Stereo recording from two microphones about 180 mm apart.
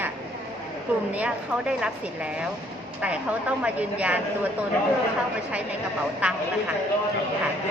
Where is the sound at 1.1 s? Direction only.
5° right (ahead or behind).